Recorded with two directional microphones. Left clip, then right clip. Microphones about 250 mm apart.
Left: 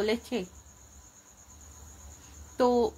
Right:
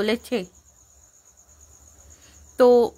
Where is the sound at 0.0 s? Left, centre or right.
Right.